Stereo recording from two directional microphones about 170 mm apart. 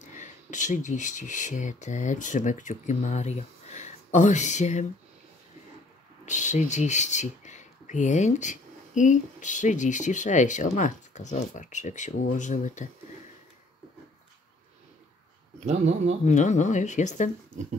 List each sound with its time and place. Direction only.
0.0 s speech: 45° left (ahead or behind)
6.2 s speech: 45° left (ahead or behind)
15.6 s speech: 45° right (ahead or behind)
16.3 s speech: 45° left (ahead or behind)